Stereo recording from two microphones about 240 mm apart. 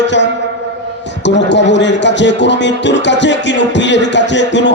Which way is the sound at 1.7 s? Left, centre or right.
Left.